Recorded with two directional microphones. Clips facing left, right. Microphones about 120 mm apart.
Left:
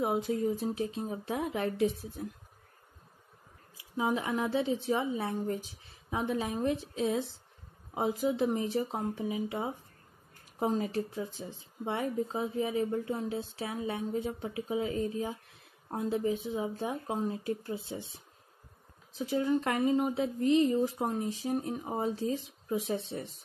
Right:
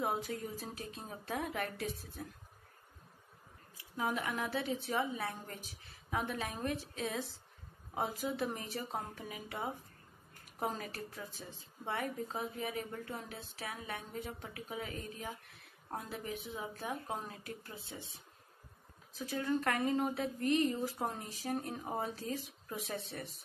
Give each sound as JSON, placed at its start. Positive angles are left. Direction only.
{"t": 0.0, "sound": "speech", "side_deg": 20}
{"t": 3.9, "sound": "speech", "side_deg": 25}